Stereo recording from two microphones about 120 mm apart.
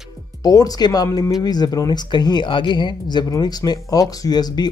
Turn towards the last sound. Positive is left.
turn(degrees=35)  # may be behind; listen again after turning